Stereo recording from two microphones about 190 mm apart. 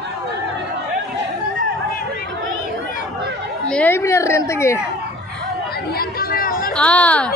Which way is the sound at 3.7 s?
10° left (ahead or behind).